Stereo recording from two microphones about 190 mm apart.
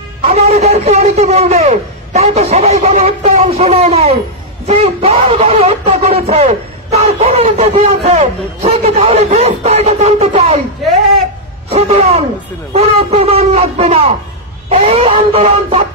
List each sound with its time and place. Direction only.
0.3 s a man's voice: 35° right (ahead or behind)
11.7 s speech: 35° right (ahead or behind)
14.7 s a sound: 30° right (ahead or behind)